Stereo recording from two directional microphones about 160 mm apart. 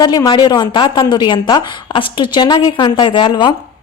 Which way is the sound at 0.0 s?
25° left (ahead or behind).